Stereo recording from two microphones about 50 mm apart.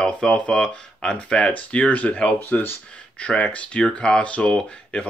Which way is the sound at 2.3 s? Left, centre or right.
Left.